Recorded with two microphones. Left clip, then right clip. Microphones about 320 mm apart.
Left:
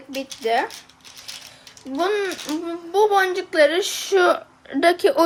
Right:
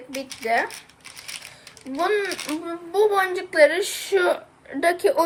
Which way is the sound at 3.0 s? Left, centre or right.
Left.